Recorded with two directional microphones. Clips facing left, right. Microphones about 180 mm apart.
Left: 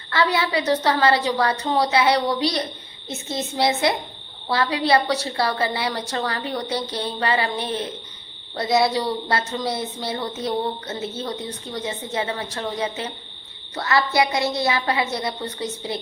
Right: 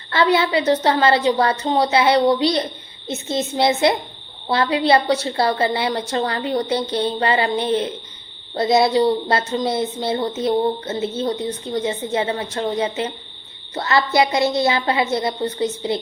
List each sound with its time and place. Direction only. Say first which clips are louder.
0.1 s a woman's voice: right 4 dB; 25° right (ahead or behind)
8.5 s a woman's voice: right 4 dB; 25° right (ahead or behind)